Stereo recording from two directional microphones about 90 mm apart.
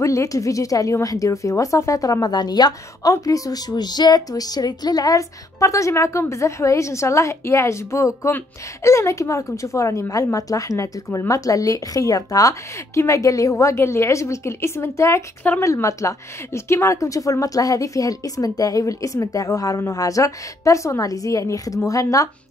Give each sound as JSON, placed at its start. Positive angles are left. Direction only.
{"t": 0.0, "sound": "speech", "side_deg": 35}